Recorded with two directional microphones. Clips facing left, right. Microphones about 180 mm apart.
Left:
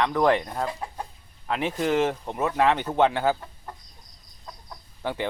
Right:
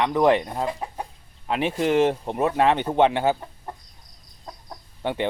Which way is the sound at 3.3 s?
25° right (ahead or behind).